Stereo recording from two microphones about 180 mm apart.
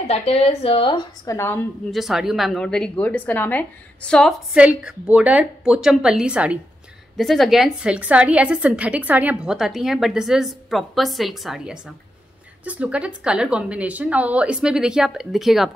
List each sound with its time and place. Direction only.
0.0 s a woman's voice: 35° left (ahead or behind); by 1.7 s 15° left (ahead or behind)
1.9 s a woman's voice: centre (ahead or behind)